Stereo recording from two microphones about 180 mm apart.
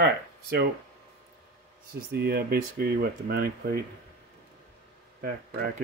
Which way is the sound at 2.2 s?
60° right (ahead or behind).